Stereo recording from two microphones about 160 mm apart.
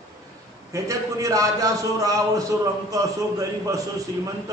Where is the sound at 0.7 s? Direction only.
20° right (ahead or behind).